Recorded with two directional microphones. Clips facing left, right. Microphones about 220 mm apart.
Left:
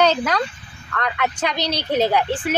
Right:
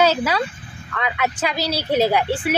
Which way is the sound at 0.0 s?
5° right (ahead or behind).